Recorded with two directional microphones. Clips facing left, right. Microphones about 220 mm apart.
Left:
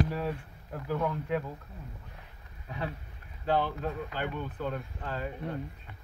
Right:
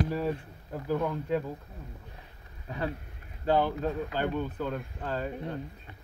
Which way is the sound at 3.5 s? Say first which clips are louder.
Right 3 dB; 40° right (ahead or behind).